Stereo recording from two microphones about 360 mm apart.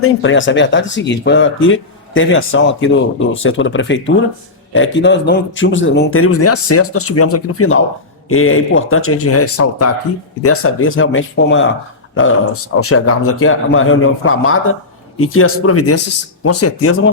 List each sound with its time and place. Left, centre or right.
0.0 s speech: left